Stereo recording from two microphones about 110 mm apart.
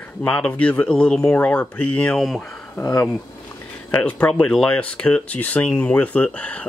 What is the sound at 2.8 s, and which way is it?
Speech, 35° left (ahead or behind).